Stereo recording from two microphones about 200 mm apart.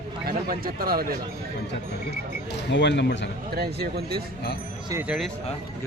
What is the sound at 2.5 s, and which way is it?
Speech, 60° left (ahead or behind).